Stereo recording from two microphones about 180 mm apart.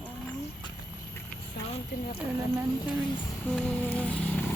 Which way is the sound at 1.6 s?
35° left (ahead or behind).